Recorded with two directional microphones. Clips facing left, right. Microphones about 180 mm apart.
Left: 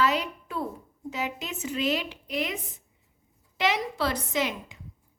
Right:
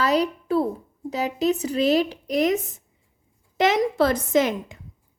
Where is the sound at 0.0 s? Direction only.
35° right (ahead or behind).